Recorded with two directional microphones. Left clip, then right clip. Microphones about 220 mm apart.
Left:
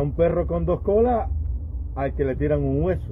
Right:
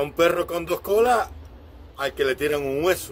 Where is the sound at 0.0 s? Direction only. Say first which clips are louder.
Right 1 dB; 20° right (ahead or behind).